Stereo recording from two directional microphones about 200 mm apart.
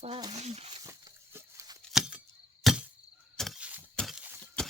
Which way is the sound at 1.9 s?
5° right (ahead or behind).